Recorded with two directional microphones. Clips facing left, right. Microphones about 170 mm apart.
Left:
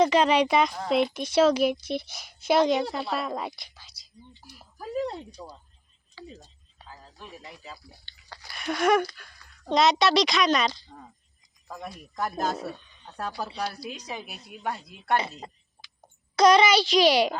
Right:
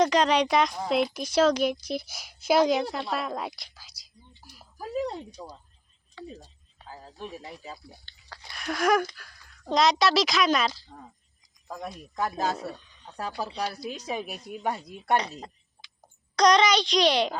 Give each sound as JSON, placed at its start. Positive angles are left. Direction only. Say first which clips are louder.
{"t": 0.0, "sound": "a woman's voice", "louder": "left 1 dB", "side_deg": 5}
{"t": 4.4, "sound": "a sound", "louder": "even", "side_deg": 0}
{"t": 6.2, "sound": "speech", "louder": "right 3 dB", "side_deg": 5}
{"t": 8.1, "sound": "chewing", "louder": "left 1 dB", "side_deg": 0}
{"t": 8.5, "sound": "a woman's voice", "louder": "left 1 dB", "side_deg": 0}
{"t": 12.6, "sound": "speech", "louder": "left 1 dB", "side_deg": 0}
{"t": 14.6, "sound": "speech", "louder": "right 1 dB", "side_deg": -15}
{"t": 15.2, "sound": "a woman's voice", "louder": "left 1 dB", "side_deg": 5}
{"t": 15.8, "sound": "a sound", "louder": "left 1 dB", "side_deg": 15}
{"t": 16.3, "sound": "a woman's voice", "louder": "left 2 dB", "side_deg": 5}